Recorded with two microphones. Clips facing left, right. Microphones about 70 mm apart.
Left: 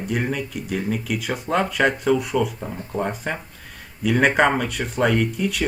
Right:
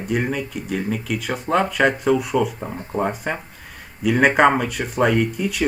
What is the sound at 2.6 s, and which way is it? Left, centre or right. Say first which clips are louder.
Speech: right 2 dB; centre.